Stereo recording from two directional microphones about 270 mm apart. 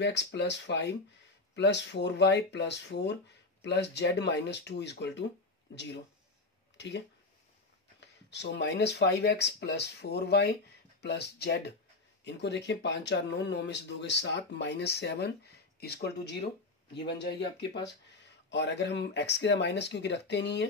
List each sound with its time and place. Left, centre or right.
0.0 s speech: left
8.0 s speech: left